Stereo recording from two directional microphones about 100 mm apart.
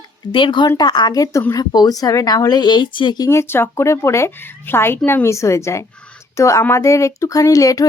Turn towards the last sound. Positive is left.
turn(degrees=35)  # may be behind; listen again after turning